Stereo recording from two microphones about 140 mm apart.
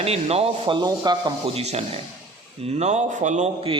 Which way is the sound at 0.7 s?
30° right (ahead or behind).